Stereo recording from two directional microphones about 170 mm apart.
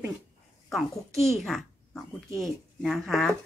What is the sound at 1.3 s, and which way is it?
A child's voice, centre (ahead or behind).